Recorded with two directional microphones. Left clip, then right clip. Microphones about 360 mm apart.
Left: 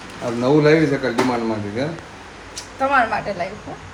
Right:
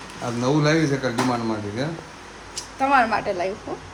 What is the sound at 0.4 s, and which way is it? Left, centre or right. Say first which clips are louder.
Speech: left 6 dB; centre.